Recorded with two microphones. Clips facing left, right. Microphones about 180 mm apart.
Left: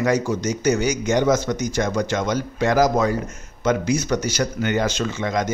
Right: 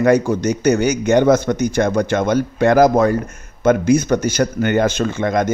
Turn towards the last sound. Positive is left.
turn(degrees=-55)  # may be behind; listen again after turning